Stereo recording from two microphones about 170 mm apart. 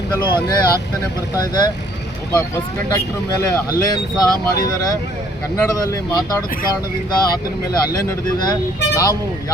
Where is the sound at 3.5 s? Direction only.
20° left (ahead or behind).